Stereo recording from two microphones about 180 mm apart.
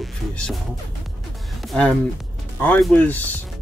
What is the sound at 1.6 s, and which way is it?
Speech, centre (ahead or behind).